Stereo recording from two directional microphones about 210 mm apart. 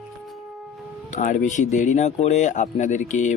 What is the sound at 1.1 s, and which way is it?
Speech, 35° left (ahead or behind).